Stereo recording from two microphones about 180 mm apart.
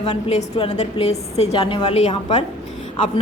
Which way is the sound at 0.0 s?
35° left (ahead or behind).